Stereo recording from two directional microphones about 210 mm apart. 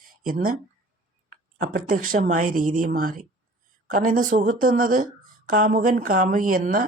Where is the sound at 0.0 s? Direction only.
40° right (ahead or behind).